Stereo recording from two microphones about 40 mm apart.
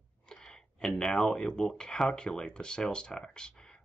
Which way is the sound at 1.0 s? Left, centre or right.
Centre.